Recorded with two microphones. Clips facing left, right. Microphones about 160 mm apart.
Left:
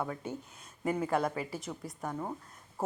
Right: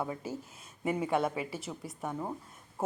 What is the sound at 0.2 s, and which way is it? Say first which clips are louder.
Speech: right 1 dB; 5° right (ahead or behind).